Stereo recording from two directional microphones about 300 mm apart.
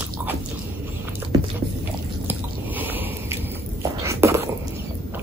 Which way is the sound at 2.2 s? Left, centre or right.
Centre.